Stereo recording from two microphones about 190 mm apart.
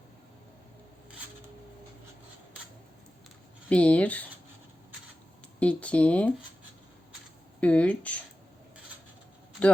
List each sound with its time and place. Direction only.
3.7 s speech: 5° left (ahead or behind)
5.5 s speech: 5° left (ahead or behind)
7.6 s speech: 5° left (ahead or behind)